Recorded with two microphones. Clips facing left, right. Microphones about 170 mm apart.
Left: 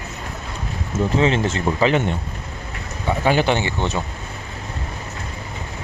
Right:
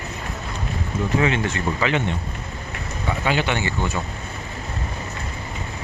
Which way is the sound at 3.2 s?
35° left (ahead or behind).